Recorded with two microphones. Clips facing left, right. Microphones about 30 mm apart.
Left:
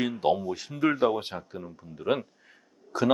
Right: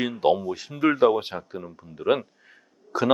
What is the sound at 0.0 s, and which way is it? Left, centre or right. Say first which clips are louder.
Speech: right 4 dB; centre.